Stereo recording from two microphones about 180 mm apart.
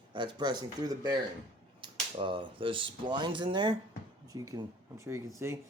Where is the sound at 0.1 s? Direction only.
25° right (ahead or behind).